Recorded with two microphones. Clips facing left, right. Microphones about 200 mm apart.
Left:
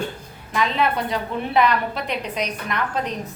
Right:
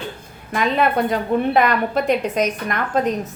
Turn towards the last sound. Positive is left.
turn(degrees=-45)  # may be behind; listen again after turning